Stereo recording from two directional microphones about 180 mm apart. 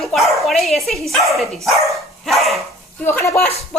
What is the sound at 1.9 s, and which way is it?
Dog, centre (ahead or behind).